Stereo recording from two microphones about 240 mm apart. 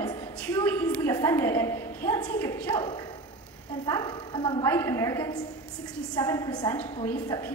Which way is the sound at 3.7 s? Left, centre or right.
Centre.